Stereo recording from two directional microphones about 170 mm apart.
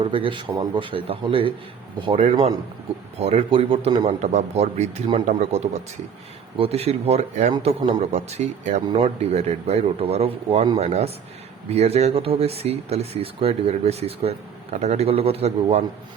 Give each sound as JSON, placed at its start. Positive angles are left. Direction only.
{"t": 0.0, "sound": "speech", "side_deg": -30}
{"t": 3.2, "sound": "speech", "side_deg": -35}